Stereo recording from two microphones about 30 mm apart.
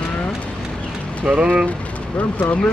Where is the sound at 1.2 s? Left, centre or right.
Right.